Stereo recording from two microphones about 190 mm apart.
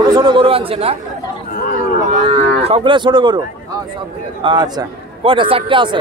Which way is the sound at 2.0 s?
35° right (ahead or behind).